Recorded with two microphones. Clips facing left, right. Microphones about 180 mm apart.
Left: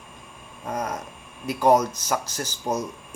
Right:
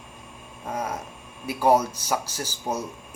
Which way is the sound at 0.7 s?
5° right (ahead or behind).